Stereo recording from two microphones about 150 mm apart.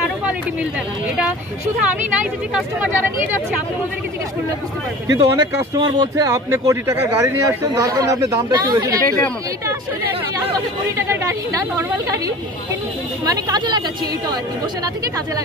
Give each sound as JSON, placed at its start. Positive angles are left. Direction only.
{"t": 5.1, "sound": "speech", "side_deg": -30}
{"t": 11.0, "sound": "speech", "side_deg": -20}
{"t": 13.2, "sound": "speech", "side_deg": -25}